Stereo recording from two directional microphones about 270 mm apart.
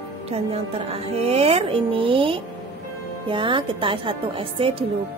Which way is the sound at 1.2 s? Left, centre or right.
Right.